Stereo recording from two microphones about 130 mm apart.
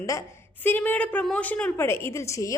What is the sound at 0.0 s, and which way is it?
A woman's voice, 25° left (ahead or behind).